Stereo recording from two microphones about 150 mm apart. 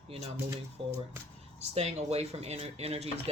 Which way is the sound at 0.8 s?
40° right (ahead or behind).